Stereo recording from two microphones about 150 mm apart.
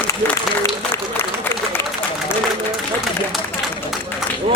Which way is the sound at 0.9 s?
15° left (ahead or behind).